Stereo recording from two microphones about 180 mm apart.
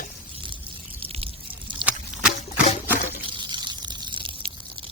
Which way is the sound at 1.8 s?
5° right (ahead or behind).